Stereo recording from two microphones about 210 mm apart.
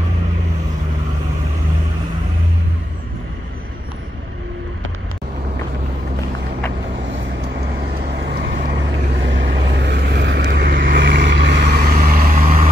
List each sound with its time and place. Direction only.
8.3 s vehicle: 55° right (ahead or behind)